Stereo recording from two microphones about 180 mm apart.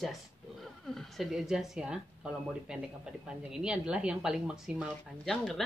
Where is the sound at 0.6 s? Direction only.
Centre (ahead or behind).